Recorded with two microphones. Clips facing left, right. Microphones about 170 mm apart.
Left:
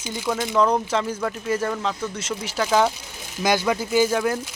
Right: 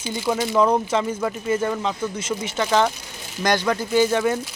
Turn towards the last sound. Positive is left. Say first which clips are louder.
# right 1 dB
turn(degrees=0)  # may be behind; listen again after turning